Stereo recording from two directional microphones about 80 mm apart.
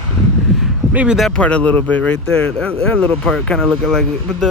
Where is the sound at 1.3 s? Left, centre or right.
Centre.